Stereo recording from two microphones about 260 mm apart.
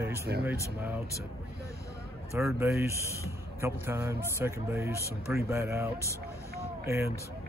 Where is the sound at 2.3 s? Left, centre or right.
Centre.